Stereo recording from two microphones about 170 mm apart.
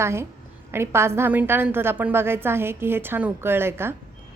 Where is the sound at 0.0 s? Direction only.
15° right (ahead or behind).